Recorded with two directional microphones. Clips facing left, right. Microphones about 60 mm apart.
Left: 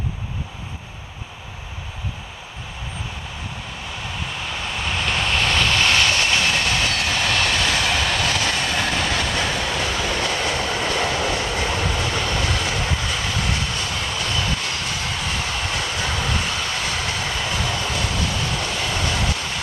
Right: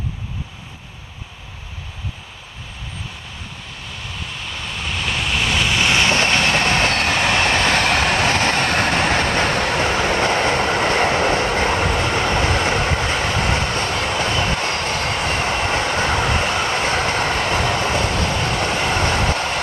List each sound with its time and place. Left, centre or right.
4.5 s vehicle: centre
6.0 s train: right